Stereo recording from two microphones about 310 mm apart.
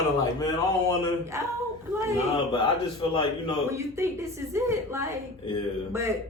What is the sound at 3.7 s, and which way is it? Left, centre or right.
Speech, centre.